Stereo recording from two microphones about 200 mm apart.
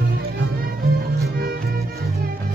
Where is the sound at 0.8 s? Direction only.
50° right (ahead or behind).